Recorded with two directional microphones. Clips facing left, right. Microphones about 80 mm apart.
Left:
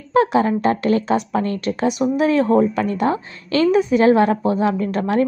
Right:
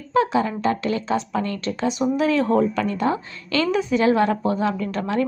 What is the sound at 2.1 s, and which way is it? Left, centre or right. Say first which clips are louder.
A woman's voice: left 4 dB; left.